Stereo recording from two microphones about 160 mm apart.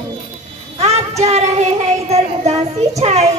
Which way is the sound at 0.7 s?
45° right (ahead or behind).